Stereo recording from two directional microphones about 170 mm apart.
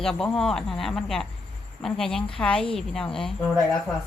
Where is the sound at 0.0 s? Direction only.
5° left (ahead or behind).